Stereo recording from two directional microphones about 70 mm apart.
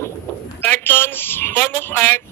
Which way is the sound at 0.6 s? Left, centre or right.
Left.